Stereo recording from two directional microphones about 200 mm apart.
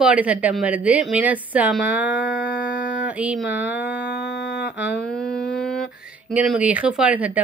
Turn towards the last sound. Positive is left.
turn(degrees=-5)  # may be behind; listen again after turning